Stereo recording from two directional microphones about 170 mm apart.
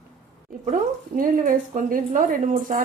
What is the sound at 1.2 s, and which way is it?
Speech, 55° right (ahead or behind).